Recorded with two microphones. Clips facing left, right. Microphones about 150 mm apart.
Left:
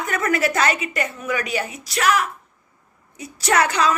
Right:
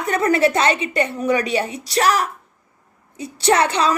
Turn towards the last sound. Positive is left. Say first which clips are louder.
# right 2 dB
turn(degrees=-30)  # may be behind; listen again after turning